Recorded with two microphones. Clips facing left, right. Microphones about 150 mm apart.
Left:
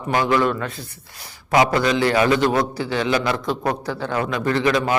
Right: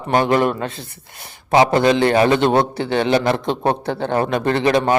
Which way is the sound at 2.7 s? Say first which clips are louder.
Right 4 dB; 60° right (ahead or behind).